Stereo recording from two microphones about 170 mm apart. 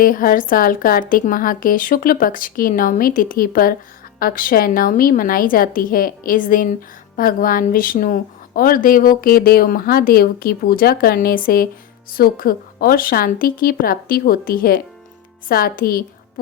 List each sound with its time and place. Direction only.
0.0 s a woman's voice: 55° left (ahead or behind)